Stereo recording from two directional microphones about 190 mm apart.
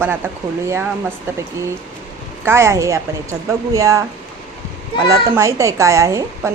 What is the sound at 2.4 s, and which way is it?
A woman's voice, 15° right (ahead or behind).